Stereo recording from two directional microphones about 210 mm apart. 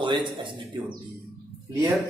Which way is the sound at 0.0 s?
20° right (ahead or behind).